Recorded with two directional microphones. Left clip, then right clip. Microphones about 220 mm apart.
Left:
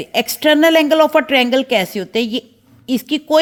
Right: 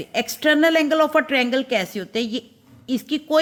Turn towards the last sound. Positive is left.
turn(degrees=25)  # may be behind; listen again after turning